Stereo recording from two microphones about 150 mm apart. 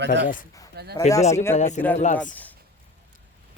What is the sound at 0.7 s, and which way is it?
Speech, 90° right.